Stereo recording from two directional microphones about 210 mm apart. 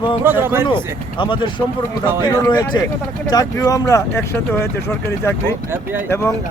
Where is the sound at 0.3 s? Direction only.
10° right (ahead or behind).